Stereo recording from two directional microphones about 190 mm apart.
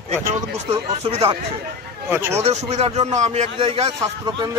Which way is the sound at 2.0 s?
15° right (ahead or behind).